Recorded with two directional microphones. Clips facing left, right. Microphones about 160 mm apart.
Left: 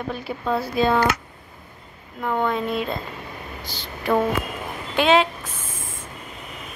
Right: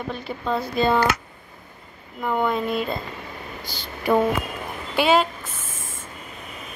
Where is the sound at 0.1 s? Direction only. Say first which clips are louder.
Left 1 dB; 5° left (ahead or behind).